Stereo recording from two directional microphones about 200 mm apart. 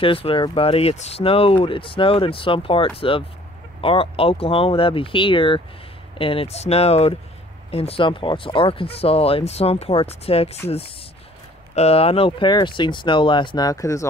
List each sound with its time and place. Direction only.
0.0 s speech: 25° left (ahead or behind)
11.7 s speech: 30° left (ahead or behind)